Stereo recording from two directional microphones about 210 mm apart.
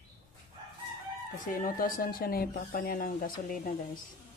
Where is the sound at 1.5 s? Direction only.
40° left (ahead or behind).